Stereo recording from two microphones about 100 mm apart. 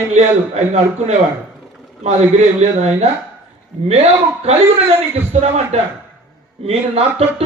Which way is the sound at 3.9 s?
90° right.